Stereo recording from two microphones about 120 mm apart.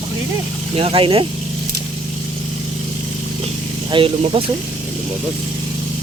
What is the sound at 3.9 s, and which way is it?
Speech, 45° right (ahead or behind).